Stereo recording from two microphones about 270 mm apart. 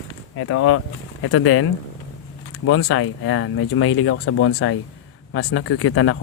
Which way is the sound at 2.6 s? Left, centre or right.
Left.